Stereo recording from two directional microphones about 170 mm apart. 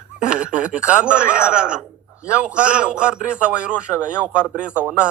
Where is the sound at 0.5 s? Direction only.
5° right (ahead or behind).